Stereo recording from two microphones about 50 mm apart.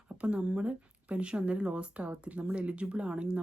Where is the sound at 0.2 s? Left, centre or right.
Right.